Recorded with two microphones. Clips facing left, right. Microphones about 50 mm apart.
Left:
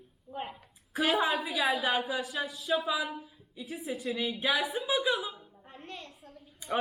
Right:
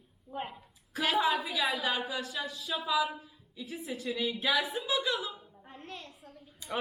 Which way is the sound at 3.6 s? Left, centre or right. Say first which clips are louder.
Left 2 dB; centre.